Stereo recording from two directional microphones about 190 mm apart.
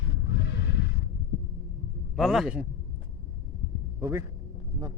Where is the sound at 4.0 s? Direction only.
15° right (ahead or behind).